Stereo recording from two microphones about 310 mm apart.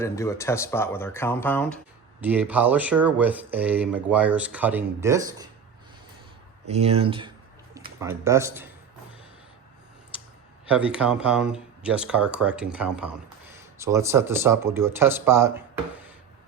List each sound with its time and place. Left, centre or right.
0.0 s speech: centre
2.2 s speech: centre
6.7 s speech: centre
10.9 s speech: centre